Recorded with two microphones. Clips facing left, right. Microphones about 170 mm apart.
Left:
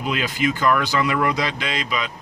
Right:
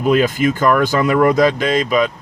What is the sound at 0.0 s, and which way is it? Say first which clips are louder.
Speech: right 9 dB; 45° right (ahead or behind).